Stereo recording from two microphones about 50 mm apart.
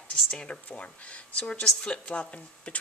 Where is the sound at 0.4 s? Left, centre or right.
Left.